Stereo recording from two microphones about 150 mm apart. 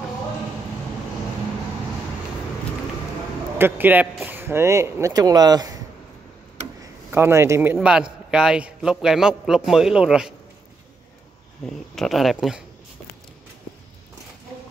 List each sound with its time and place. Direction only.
3.5 s speech: 15° right (ahead or behind)
7.1 s a man's voice: 15° right (ahead or behind)
11.6 s a man's voice: centre (ahead or behind)